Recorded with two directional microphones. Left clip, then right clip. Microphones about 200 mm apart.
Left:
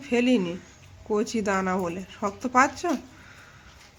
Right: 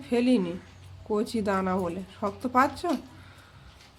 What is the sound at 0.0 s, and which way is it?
A woman's voice, centre (ahead or behind).